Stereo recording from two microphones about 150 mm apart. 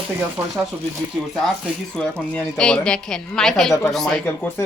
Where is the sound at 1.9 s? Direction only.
5° left (ahead or behind).